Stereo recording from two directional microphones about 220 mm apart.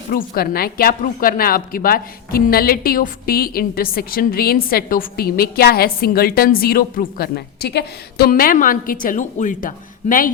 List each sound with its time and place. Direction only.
0.1 s speech: 40° left (ahead or behind)